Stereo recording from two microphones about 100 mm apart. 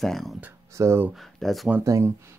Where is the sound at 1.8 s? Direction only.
30° right (ahead or behind).